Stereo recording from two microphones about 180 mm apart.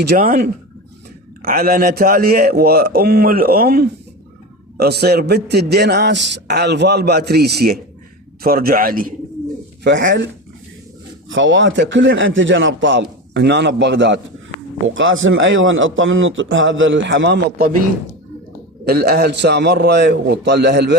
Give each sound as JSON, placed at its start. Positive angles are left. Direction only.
{"t": 0.0, "sound": "a man's voice", "side_deg": -60}
{"t": 9.8, "sound": "a man's voice", "side_deg": -80}
{"t": 11.3, "sound": "a man's voice", "side_deg": -90}
{"t": 18.9, "sound": "a man's voice", "side_deg": -60}